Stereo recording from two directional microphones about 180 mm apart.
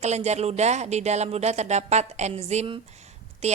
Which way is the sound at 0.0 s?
40° right (ahead or behind).